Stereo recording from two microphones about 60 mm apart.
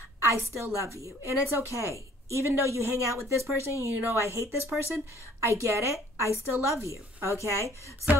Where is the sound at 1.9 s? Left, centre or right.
Right.